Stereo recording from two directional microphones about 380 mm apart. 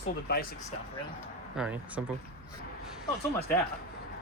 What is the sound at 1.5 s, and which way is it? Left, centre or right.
Speech, centre.